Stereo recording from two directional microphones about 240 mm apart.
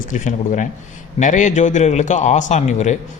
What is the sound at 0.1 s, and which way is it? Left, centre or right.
A man's voice, left.